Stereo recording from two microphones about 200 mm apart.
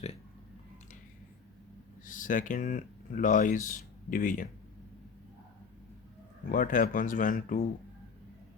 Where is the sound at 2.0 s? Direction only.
40° left (ahead or behind).